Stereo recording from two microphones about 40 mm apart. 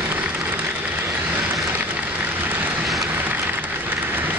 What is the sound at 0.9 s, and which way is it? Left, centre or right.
Vehicle, right.